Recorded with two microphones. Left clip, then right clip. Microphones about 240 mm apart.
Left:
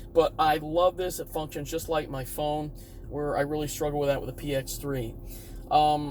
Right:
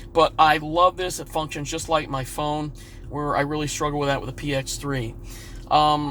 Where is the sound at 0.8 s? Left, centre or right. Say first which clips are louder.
Right 5 dB; right.